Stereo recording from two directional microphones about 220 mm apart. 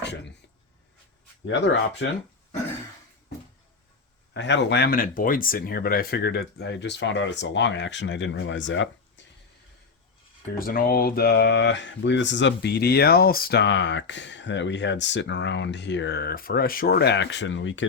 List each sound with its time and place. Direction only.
0.0 s a sound: 50° left (ahead or behind)
1.5 s speech: 50° left (ahead or behind)
4.4 s speech: 50° left (ahead or behind)
10.6 s speech: 40° left (ahead or behind); by 17.8 s 60° left (ahead or behind)